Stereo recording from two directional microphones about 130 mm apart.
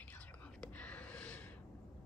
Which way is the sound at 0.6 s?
10° left (ahead or behind).